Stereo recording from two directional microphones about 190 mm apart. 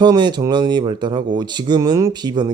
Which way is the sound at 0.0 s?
25° right (ahead or behind).